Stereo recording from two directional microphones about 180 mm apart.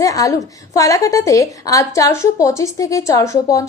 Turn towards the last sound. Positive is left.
turn(degrees=15)  # may be behind; listen again after turning